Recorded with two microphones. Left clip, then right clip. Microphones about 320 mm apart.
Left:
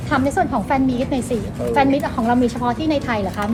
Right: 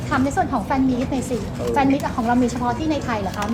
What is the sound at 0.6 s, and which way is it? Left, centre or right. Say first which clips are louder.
A woman's voice: left 2 dB; left.